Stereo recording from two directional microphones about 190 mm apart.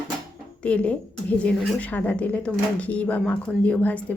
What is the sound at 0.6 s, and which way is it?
A woman's voice, 5° left (ahead or behind).